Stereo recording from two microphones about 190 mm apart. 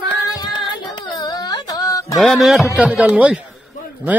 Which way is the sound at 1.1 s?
20° left (ahead or behind).